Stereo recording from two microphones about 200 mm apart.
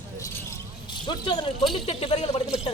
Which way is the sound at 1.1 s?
25° left (ahead or behind).